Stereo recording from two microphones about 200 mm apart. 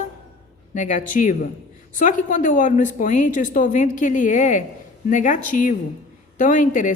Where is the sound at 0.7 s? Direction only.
40° left (ahead or behind).